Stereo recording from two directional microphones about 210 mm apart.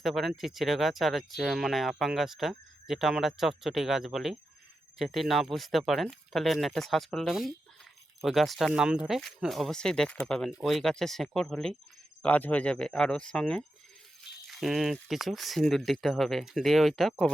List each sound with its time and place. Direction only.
0.0 s speech: centre (ahead or behind)